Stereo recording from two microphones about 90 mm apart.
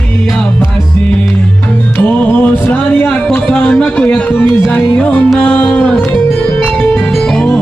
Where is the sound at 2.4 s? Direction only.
15° left (ahead or behind).